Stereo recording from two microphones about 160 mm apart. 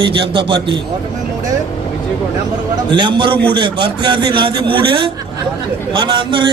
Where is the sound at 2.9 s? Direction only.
30° right (ahead or behind).